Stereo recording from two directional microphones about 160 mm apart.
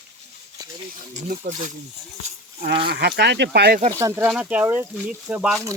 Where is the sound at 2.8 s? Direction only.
90° right.